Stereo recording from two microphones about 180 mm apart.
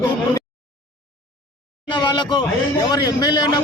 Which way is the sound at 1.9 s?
25° left (ahead or behind).